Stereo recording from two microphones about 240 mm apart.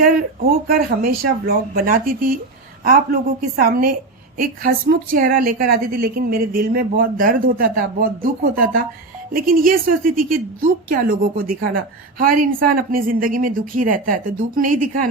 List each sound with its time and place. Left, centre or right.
0.0 s a woman's voice: right